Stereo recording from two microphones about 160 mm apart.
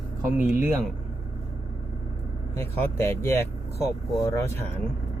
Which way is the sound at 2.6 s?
15° left (ahead or behind).